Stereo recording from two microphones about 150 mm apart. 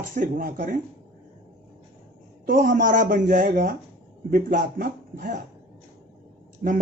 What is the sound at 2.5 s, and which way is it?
A man's voice, 60° right (ahead or behind).